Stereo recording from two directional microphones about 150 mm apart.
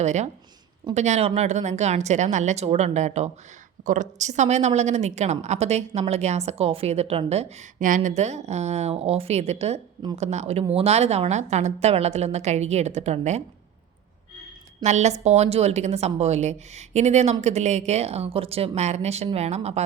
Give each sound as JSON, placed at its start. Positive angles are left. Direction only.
{"t": 0.0, "sound": "a woman's voice", "side_deg": -50}
{"t": 14.8, "sound": "a woman's voice", "side_deg": -50}